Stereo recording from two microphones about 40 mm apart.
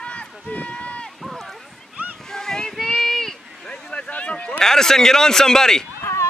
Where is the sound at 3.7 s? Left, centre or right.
Left.